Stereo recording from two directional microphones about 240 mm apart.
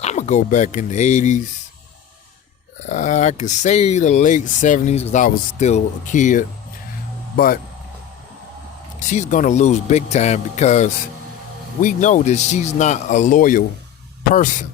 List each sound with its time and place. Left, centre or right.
0.0 s speech: left
2.8 s speech: left
9.0 s speech: left